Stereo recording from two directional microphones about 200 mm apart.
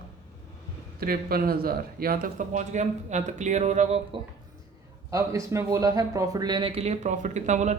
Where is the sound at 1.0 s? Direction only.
50° right (ahead or behind); by 4.2 s 35° right (ahead or behind).